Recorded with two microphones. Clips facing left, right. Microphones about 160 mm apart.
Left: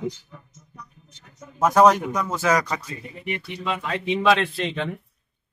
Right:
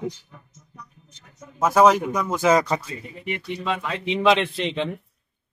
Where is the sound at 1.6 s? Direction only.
5° right (ahead or behind); by 4.9 s 20° right (ahead or behind).